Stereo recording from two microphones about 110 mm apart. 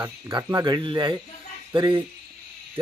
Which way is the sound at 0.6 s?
45° right (ahead or behind).